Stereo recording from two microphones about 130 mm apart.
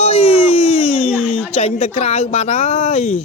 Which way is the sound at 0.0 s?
50° left (ahead or behind).